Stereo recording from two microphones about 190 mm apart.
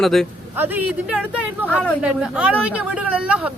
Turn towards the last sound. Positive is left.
turn(degrees=-5)  # may be behind; listen again after turning